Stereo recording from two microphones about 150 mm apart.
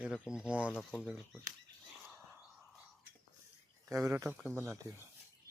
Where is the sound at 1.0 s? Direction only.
Centre (ahead or behind).